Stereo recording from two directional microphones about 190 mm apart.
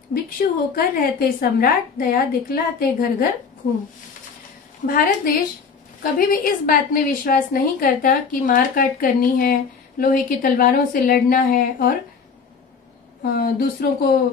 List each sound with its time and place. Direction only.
0.1 s a woman's voice: 50° left (ahead or behind)
4.8 s a woman's voice: 50° left (ahead or behind)
13.4 s a woman's voice: 50° left (ahead or behind)